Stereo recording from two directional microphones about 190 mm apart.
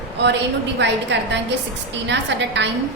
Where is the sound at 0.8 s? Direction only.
65° right (ahead or behind).